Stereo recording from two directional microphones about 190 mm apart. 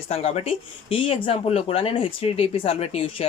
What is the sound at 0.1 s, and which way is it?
Speech, 30° left (ahead or behind).